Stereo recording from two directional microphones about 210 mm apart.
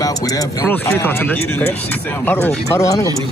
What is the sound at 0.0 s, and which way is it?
Speech, 15° left (ahead or behind).